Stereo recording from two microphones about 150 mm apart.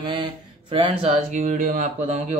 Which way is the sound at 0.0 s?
35° right (ahead or behind).